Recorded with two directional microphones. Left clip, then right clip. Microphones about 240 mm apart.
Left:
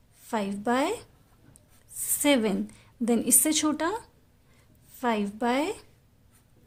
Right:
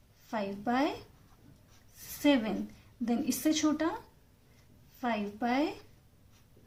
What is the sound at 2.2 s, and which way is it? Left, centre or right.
A woman's voice, left.